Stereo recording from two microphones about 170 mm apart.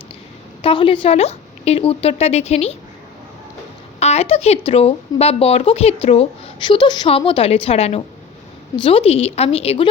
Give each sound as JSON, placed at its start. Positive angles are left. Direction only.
{"t": 0.6, "sound": "speech", "side_deg": 30}
{"t": 4.0, "sound": "speech", "side_deg": 40}